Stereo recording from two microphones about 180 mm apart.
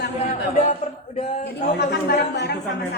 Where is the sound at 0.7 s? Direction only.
40° left (ahead or behind).